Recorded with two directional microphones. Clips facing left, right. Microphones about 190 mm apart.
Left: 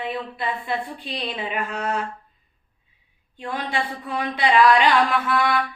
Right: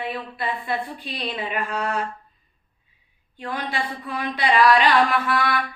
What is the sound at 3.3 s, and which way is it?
A woman's voice, 20° left (ahead or behind).